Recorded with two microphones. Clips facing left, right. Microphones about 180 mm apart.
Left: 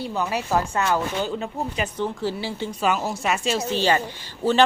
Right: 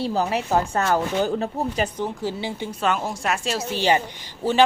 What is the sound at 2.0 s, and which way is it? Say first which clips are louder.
Speech: left 1 dB; 15° right (ahead or behind).